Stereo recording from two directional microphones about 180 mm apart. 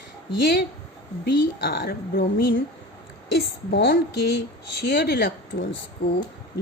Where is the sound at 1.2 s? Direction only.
70° left (ahead or behind).